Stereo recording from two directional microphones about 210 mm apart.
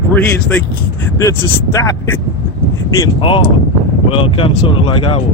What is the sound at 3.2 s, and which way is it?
Speech, 25° left (ahead or behind).